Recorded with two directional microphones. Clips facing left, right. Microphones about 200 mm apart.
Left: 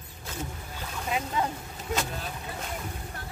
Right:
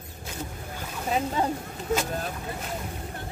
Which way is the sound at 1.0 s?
35° right (ahead or behind).